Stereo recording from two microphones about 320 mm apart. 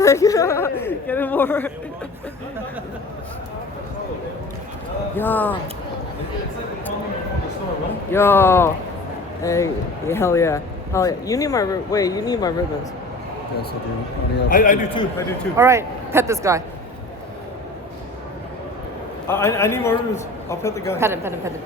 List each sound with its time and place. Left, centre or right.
0.0 s speech: centre
5.1 s speech: centre
8.1 s speech: centre
14.3 s a man's voice: left
15.5 s speech: centre
19.3 s speech: centre
21.0 s speech: centre